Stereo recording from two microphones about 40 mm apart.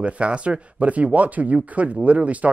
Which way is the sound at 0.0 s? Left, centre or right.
Right.